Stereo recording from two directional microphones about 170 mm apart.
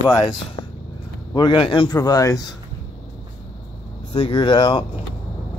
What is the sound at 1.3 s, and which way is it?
A man's voice, 25° left (ahead or behind).